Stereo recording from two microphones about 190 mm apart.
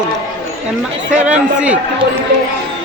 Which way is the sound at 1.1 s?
5° right (ahead or behind).